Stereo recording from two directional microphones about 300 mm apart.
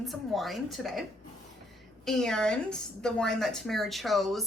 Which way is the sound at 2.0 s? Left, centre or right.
Centre.